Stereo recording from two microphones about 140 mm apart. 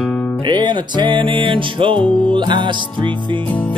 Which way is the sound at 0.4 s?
35° right (ahead or behind).